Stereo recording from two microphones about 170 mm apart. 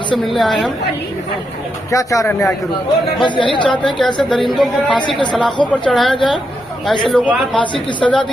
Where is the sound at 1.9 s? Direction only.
20° left (ahead or behind).